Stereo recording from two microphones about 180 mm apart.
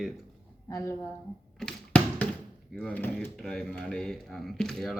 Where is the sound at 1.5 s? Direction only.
5° left (ahead or behind).